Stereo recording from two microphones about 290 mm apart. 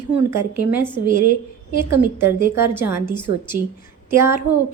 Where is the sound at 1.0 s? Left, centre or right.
Right.